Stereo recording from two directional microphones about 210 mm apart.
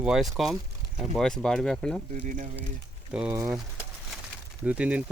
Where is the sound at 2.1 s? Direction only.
40° right (ahead or behind).